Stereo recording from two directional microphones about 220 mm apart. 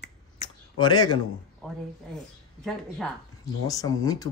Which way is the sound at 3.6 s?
15° left (ahead or behind).